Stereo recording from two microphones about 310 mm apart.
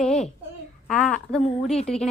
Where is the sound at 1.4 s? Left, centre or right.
Centre.